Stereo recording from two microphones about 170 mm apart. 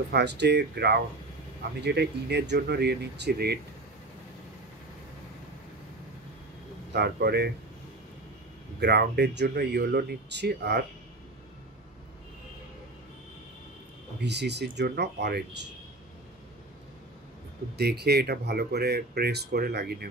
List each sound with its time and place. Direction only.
0.1 s speech: 85° right
6.9 s speech: 75° right (ahead or behind)
8.7 s speech: 75° right (ahead or behind)
14.2 s speech: 90° right
17.7 s speech: 75° right (ahead or behind)